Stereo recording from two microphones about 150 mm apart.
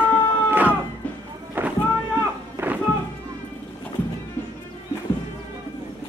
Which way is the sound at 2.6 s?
15° right (ahead or behind).